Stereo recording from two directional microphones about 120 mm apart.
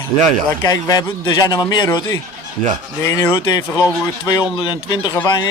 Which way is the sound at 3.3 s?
40° left (ahead or behind).